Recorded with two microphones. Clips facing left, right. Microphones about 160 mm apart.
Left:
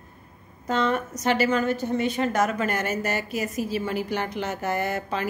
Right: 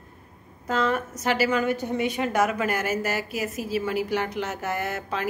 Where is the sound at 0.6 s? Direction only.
5° right (ahead or behind).